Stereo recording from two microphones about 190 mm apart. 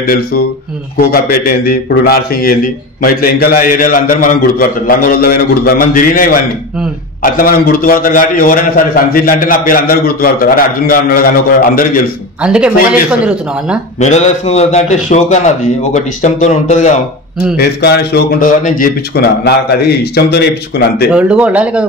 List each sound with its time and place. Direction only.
0.0 s a man's voice: 50° left (ahead or behind)
7.3 s a man's voice: 50° left (ahead or behind)
12.4 s speech: 5° right (ahead or behind)
13.9 s a man's voice: 35° left (ahead or behind)
17.6 s speech: 60° left (ahead or behind)
21.1 s speech: 5° right (ahead or behind)